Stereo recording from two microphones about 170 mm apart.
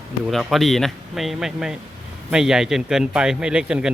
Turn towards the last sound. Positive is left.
turn(degrees=-5)  # may be behind; listen again after turning